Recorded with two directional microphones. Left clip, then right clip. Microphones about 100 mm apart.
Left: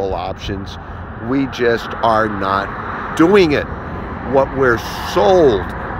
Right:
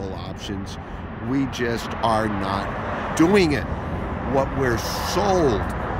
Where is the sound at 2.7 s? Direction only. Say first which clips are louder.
Left 3 dB; 20° right (ahead or behind).